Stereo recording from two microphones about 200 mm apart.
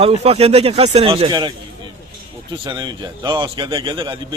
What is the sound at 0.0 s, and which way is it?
Speech, 30° right (ahead or behind).